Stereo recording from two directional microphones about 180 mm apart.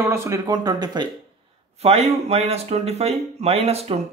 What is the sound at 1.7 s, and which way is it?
Speech, 35° right (ahead or behind).